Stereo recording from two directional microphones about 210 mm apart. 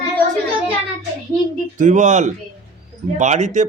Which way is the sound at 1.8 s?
35° right (ahead or behind).